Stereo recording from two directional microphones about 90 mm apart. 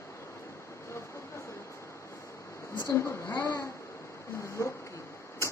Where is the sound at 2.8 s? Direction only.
30° left (ahead or behind).